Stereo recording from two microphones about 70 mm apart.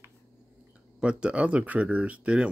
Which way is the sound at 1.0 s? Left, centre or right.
Centre.